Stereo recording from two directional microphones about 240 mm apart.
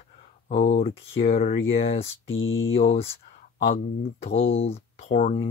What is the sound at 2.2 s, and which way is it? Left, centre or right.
Speech, left.